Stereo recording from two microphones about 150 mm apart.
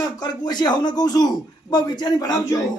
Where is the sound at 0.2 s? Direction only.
30° left (ahead or behind).